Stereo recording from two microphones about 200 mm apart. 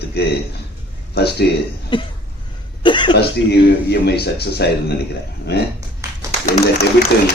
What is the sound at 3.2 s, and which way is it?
A man's voice, 55° left (ahead or behind).